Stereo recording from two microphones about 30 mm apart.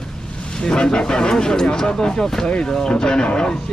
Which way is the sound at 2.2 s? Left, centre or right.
Centre.